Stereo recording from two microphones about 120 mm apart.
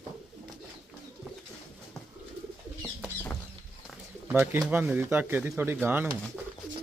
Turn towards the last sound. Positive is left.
turn(degrees=-15)  # may be behind; listen again after turning